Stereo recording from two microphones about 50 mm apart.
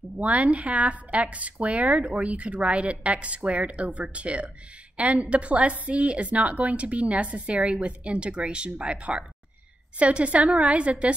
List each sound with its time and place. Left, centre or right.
0.2 s speech: right